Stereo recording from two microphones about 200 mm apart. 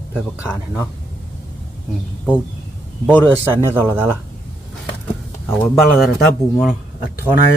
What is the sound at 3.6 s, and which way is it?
Speech, 10° right (ahead or behind).